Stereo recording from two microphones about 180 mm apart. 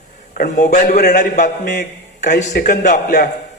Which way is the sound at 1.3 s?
45° left (ahead or behind).